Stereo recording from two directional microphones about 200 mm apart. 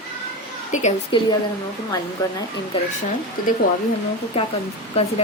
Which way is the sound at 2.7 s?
25° left (ahead or behind).